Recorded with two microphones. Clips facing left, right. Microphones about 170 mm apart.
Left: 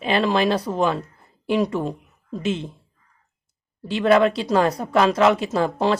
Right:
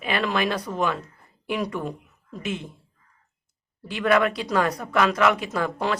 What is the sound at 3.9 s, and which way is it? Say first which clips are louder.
Speech: left 4 dB; 30° left (ahead or behind).